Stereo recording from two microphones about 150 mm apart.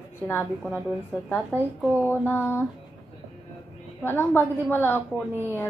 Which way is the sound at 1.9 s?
15° right (ahead or behind).